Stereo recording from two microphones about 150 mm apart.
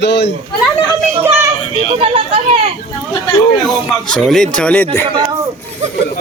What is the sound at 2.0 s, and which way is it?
Speech, 40° right (ahead or behind).